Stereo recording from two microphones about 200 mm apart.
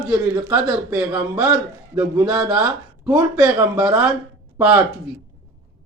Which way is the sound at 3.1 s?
15° right (ahead or behind).